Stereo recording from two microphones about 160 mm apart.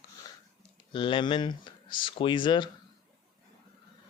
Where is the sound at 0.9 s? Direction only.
30° left (ahead or behind).